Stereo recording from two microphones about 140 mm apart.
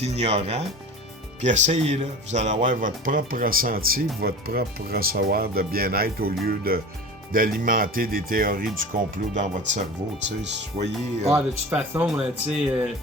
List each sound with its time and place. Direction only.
0.0 s speech: 50° right (ahead or behind); by 8.7 s 90° right
9.3 s speech: 60° right (ahead or behind)
10.8 s speech: 50° right (ahead or behind)
11.3 s speech: 10° right (ahead or behind)